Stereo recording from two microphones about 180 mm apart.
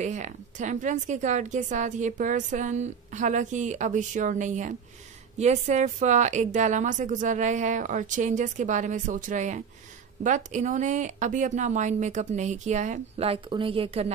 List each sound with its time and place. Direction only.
0.0 s a woman's voice: 40° right (ahead or behind)